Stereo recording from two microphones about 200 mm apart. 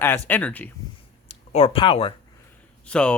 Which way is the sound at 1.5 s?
30° left (ahead or behind).